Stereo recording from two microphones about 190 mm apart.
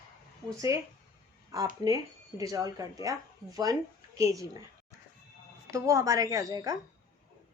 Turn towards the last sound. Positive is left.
turn(degrees=-20)  # may be behind; listen again after turning